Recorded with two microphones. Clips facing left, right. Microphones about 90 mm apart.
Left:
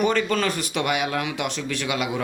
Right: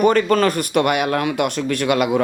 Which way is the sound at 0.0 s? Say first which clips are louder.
Right 7 dB; 50° right (ahead or behind).